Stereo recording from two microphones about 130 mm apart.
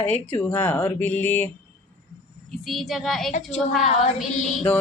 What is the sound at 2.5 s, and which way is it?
Speech, centre (ahead or behind).